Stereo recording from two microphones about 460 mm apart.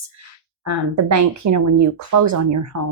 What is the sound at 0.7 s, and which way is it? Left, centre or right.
Speech, right.